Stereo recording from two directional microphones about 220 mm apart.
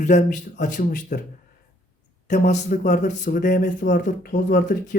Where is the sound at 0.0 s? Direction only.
35° left (ahead or behind).